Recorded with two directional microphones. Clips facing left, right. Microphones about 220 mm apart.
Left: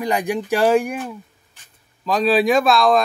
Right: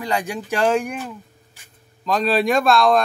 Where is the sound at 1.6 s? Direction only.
10° right (ahead or behind).